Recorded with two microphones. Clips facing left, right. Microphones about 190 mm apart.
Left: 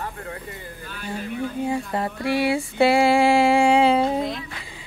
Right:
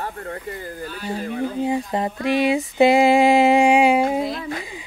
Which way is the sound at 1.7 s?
20° right (ahead or behind).